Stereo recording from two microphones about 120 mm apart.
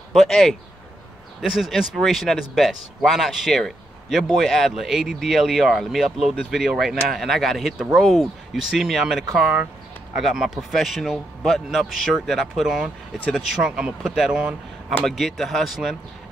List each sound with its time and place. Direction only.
0.1 s speech: 5° left (ahead or behind)